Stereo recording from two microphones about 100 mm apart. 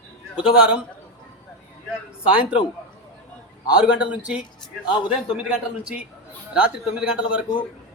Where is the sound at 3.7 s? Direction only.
10° right (ahead or behind).